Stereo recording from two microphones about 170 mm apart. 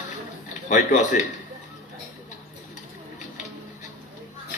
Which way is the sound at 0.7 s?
45° left (ahead or behind).